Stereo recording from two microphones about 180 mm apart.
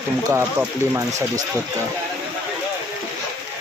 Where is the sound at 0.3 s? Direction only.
15° right (ahead or behind).